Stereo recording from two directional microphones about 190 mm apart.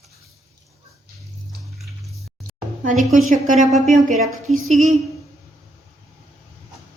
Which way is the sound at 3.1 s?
45° right (ahead or behind).